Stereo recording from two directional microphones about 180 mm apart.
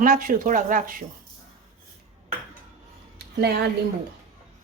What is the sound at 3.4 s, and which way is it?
Speech, 60° right (ahead or behind).